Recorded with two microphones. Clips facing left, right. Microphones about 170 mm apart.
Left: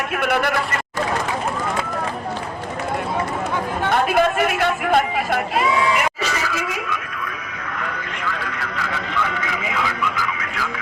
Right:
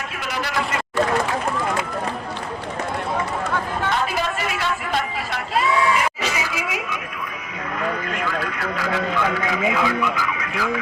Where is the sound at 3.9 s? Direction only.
55° left (ahead or behind).